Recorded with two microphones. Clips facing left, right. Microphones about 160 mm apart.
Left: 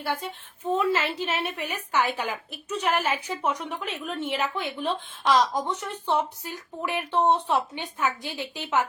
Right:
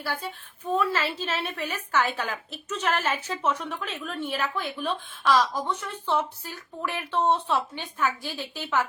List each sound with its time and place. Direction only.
0.0 s a woman's voice: 20° left (ahead or behind)